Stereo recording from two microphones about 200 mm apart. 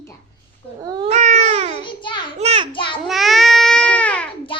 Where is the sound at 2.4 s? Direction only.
30° right (ahead or behind).